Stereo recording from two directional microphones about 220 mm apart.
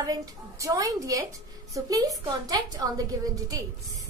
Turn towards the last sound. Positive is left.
turn(degrees=-15)  # may be behind; listen again after turning